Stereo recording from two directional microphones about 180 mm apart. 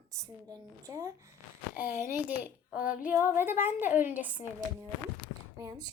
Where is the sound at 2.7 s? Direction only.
50° left (ahead or behind).